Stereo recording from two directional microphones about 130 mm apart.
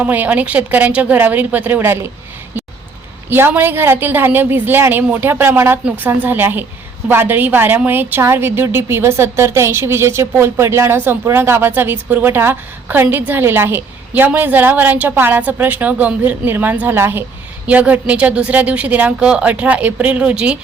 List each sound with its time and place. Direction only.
0.0 s a woman's voice: 10° right (ahead or behind)
3.2 s a woman's voice: 15° right (ahead or behind)